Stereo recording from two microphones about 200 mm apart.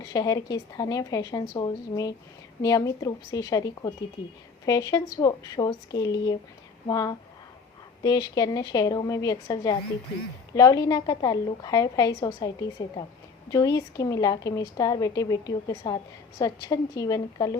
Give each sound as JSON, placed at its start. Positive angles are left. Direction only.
{"t": 0.0, "sound": "a woman's voice", "side_deg": 20}